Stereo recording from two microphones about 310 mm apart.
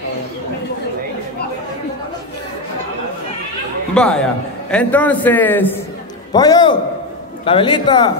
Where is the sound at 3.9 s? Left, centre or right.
Centre.